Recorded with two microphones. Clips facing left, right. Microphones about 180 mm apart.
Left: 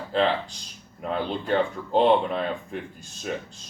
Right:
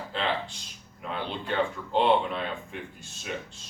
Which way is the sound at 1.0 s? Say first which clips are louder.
Left 6 dB; 40° left (ahead or behind).